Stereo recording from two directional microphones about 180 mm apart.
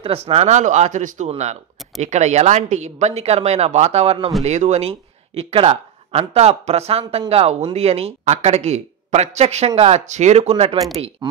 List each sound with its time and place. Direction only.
0.0 s speech: 30° right (ahead or behind)